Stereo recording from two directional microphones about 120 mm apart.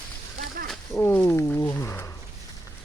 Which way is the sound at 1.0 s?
20° left (ahead or behind).